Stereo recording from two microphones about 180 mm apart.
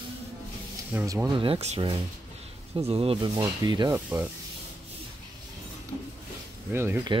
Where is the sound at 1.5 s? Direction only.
35° right (ahead or behind).